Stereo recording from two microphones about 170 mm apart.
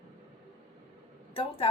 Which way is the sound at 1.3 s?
30° left (ahead or behind).